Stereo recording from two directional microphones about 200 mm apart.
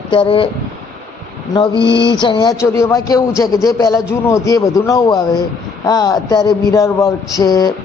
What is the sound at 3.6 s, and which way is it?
A man's voice, 20° left (ahead or behind).